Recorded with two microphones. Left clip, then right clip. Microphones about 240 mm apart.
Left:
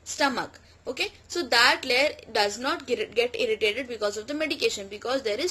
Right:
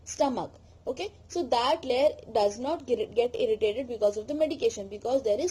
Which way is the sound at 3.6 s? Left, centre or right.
Left.